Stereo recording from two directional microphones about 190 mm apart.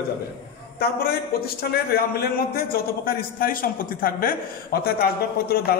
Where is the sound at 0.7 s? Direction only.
55° left (ahead or behind).